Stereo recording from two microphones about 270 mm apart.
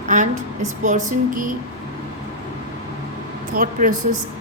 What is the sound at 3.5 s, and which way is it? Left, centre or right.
Speech, right.